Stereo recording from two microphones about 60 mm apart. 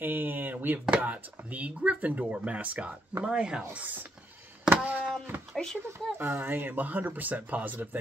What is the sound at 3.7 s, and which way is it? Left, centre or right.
Speech, right.